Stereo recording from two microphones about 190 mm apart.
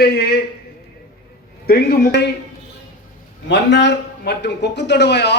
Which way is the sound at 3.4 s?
65° left (ahead or behind).